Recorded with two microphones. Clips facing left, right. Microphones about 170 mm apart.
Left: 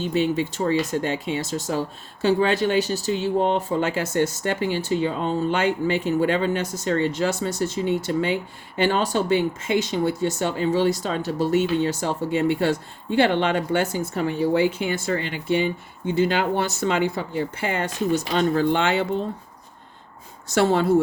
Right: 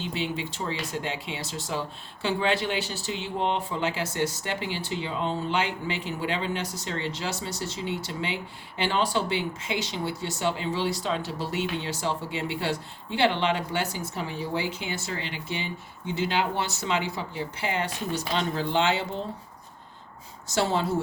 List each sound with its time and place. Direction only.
0.0 s speech: 45° left (ahead or behind)
20.5 s speech: 55° left (ahead or behind)